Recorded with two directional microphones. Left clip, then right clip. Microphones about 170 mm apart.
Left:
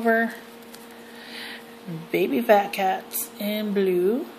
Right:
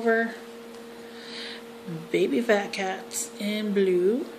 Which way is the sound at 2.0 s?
25° left (ahead or behind).